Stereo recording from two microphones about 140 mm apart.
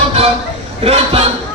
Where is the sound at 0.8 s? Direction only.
45° right (ahead or behind).